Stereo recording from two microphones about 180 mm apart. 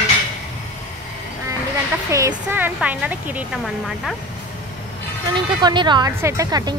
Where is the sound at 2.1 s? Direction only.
15° right (ahead or behind).